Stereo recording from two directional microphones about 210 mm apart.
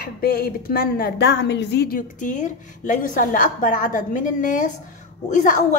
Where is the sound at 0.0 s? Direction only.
45° left (ahead or behind).